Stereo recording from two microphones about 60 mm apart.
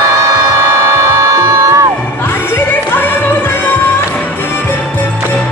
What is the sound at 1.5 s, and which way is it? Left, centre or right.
Crowd, right.